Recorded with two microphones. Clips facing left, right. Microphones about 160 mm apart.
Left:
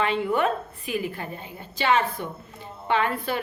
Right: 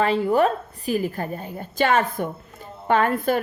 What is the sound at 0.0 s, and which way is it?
A woman's voice, 35° right (ahead or behind).